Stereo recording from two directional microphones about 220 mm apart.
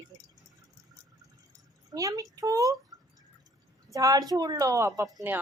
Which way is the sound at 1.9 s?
15° right (ahead or behind).